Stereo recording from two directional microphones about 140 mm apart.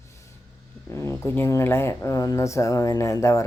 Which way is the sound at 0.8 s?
15° left (ahead or behind).